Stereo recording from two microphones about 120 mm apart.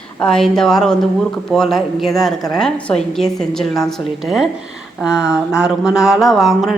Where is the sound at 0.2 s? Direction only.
5° left (ahead or behind).